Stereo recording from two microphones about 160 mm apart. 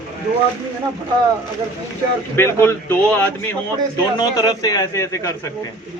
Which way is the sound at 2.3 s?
15° left (ahead or behind).